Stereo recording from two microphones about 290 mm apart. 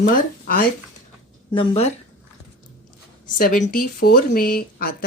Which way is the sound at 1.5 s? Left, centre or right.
Left.